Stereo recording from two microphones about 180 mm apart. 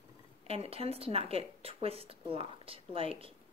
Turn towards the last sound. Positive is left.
turn(degrees=-30)  # may be behind; listen again after turning